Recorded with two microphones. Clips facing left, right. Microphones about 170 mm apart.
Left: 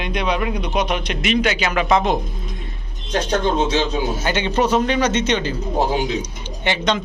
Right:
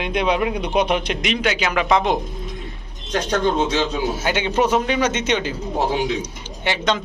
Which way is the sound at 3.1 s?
30° left (ahead or behind).